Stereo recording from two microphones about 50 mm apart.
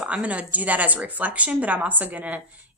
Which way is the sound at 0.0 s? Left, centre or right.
Right.